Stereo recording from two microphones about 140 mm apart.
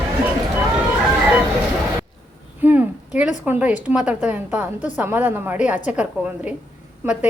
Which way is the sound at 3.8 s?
10° right (ahead or behind).